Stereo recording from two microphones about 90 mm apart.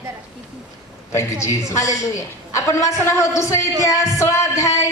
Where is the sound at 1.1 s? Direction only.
35° left (ahead or behind).